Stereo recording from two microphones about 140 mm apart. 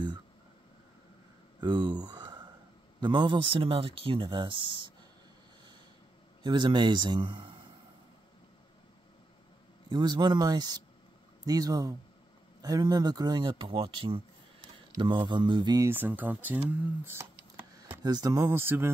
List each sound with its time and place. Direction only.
1.6 s a sound: 30° right (ahead or behind)
3.0 s speech: 35° right (ahead or behind)
6.4 s speech: 30° right (ahead or behind)
9.8 s speech: 30° right (ahead or behind)
15.9 s speech: 15° right (ahead or behind)